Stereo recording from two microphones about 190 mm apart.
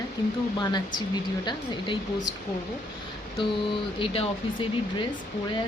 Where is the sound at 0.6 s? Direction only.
20° left (ahead or behind).